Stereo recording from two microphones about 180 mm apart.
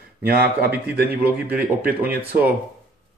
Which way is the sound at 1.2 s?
10° right (ahead or behind).